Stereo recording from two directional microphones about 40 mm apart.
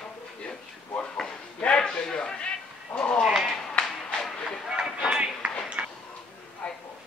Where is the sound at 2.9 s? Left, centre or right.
Left.